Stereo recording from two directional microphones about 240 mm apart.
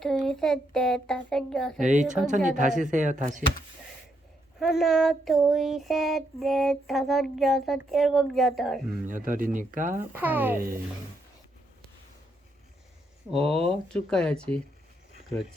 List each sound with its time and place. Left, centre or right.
0.0 s child singing: centre
1.8 s speech: right
4.6 s child singing: centre
9.0 s speech: right
10.0 s speech: centre
13.7 s child singing: centre